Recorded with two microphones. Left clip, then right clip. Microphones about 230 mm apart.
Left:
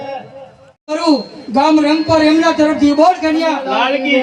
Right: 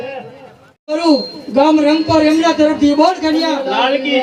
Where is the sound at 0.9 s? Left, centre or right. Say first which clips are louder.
Right 1 dB; left.